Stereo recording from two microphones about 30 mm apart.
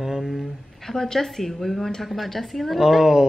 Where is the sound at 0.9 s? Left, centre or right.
Centre.